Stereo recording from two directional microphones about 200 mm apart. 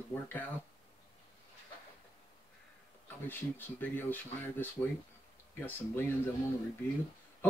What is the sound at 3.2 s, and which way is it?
Speech, 10° left (ahead or behind).